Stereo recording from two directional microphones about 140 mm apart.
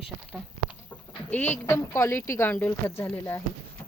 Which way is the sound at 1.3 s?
15° left (ahead or behind).